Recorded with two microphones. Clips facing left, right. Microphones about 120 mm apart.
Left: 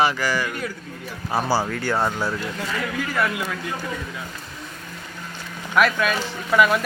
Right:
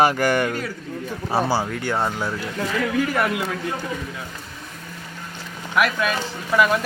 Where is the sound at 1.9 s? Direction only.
Centre (ahead or behind).